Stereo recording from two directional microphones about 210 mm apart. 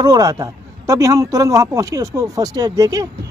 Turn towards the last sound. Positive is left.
turn(degrees=-15)  # may be behind; listen again after turning